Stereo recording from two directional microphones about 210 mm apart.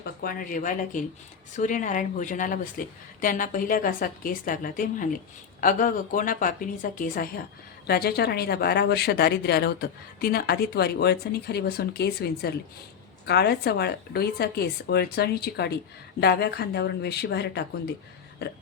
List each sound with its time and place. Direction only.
0.0 s a woman's voice: 45° left (ahead or behind)